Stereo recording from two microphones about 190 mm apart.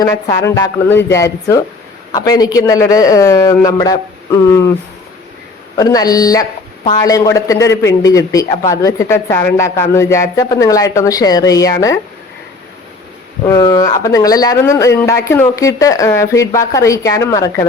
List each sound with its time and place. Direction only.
0.0 s speech: 20° left (ahead or behind)
5.7 s speech: 20° left (ahead or behind)
13.5 s speech: 20° left (ahead or behind)